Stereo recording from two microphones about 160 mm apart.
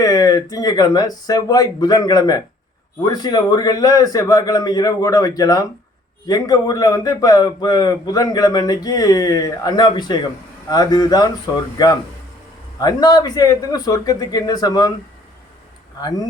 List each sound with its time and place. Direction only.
0.0 s a man's voice: 20° left (ahead or behind)